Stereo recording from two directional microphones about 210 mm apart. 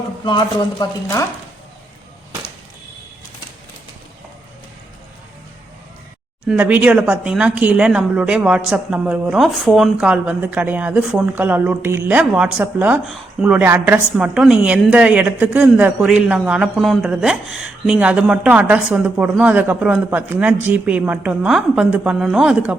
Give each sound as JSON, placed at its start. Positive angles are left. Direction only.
{"t": 0.3, "sound": "speech", "side_deg": 20}
{"t": 6.5, "sound": "speech", "side_deg": -10}